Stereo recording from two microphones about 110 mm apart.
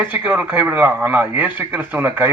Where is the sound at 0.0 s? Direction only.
15° right (ahead or behind).